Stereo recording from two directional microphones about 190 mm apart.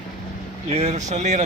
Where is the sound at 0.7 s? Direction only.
35° right (ahead or behind).